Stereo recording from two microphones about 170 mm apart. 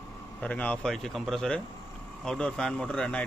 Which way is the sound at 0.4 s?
10° left (ahead or behind).